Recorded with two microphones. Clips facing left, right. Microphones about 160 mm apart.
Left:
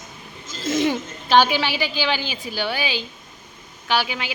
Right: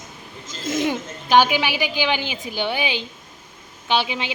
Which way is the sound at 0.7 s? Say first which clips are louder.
Left 2 dB; 10° right (ahead or behind).